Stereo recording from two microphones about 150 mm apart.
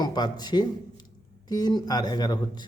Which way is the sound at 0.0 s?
30° left (ahead or behind).